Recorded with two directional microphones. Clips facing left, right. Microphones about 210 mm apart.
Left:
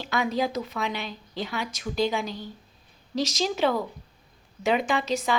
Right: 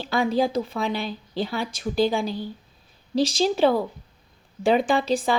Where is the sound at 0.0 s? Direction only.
30° right (ahead or behind).